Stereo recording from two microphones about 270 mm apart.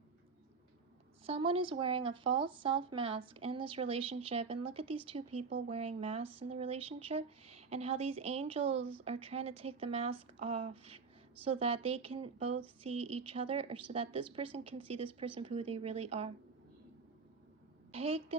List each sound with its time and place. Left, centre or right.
1.2 s speech: centre
17.9 s speech: right